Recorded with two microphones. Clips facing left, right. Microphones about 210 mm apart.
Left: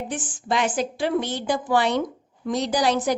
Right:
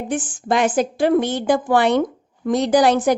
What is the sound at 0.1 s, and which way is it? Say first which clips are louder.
A woman's voice: right 9 dB; 50° right (ahead or behind).